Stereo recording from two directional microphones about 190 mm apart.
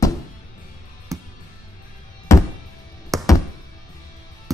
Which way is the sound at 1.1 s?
15° right (ahead or behind).